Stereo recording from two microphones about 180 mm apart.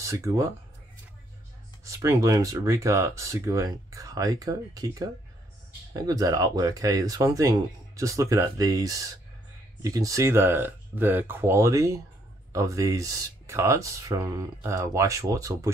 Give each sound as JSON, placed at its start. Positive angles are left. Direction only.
{"t": 0.0, "sound": "speech", "side_deg": -15}
{"t": 1.9, "sound": "speech", "side_deg": -20}